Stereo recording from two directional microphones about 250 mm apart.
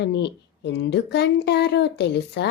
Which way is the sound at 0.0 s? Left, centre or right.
Left.